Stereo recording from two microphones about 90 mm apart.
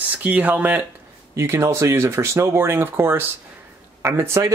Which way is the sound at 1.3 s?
30° right (ahead or behind).